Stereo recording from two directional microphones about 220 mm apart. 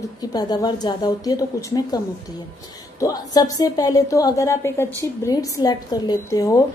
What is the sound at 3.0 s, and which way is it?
A woman's voice, 15° left (ahead or behind).